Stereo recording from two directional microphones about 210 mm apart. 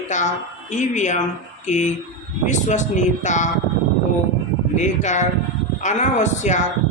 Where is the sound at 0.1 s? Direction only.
35° left (ahead or behind).